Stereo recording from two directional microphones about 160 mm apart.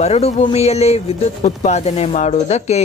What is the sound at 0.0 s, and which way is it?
Speech, 45° left (ahead or behind).